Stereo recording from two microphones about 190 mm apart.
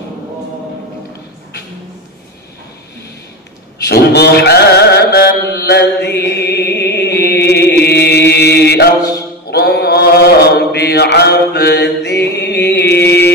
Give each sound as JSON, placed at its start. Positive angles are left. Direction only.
{"t": 3.8, "sound": "chant", "side_deg": 60}
{"t": 9.5, "sound": "mantra", "side_deg": 60}